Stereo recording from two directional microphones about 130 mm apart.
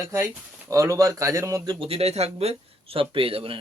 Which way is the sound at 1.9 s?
50° right (ahead or behind).